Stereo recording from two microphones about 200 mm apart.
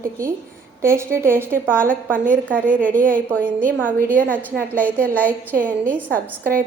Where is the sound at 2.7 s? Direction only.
40° right (ahead or behind).